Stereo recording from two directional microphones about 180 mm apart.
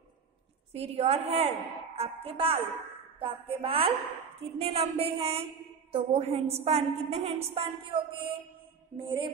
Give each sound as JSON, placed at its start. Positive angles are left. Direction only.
{"t": 0.7, "sound": "a woman's voice", "side_deg": -35}